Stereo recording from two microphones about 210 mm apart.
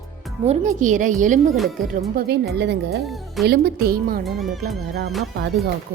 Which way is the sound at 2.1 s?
50° right (ahead or behind).